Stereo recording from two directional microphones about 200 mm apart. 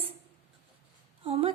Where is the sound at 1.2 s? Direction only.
30° right (ahead or behind).